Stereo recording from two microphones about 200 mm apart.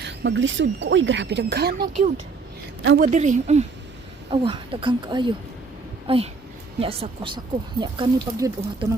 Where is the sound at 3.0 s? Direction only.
35° right (ahead or behind).